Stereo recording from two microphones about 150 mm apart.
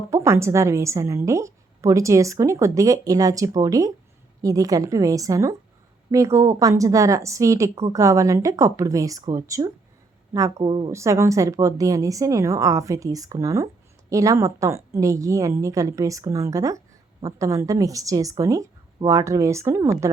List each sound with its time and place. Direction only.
0.1 s a woman's voice: 20° right (ahead or behind)
10.7 s a woman's voice: 30° right (ahead or behind)
10.9 s a woman's voice: 20° right (ahead or behind)